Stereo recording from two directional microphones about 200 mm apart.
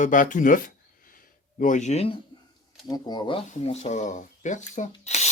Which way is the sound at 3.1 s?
25° left (ahead or behind).